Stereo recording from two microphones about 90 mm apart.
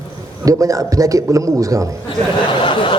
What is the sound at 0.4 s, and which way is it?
Speech, 40° right (ahead or behind).